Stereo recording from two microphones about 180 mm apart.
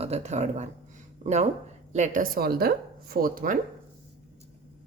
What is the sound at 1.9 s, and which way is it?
Speech, 45° right (ahead or behind).